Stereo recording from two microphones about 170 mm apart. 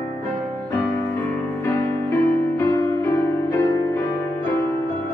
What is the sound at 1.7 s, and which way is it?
Music, 15° left (ahead or behind).